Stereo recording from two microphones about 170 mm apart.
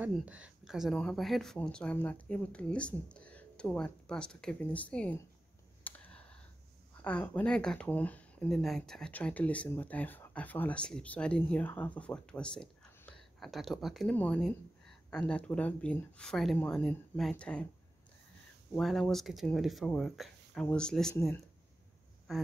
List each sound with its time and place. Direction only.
0.1 s speech: 5° right (ahead or behind)
5.9 s a sound: 10° left (ahead or behind)
7.0 s speech: 5° left (ahead or behind)
18.8 s speech: centre (ahead or behind)